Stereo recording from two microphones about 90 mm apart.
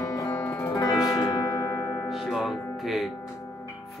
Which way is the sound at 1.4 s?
45° left (ahead or behind).